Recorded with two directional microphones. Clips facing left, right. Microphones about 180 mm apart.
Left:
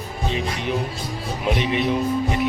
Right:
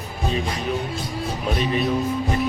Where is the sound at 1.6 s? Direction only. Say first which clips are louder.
Right 2 dB; 20° left (ahead or behind).